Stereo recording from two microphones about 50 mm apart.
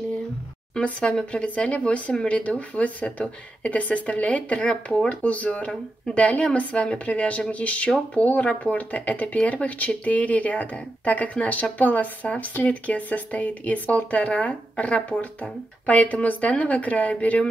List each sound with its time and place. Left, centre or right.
1.0 s speech: centre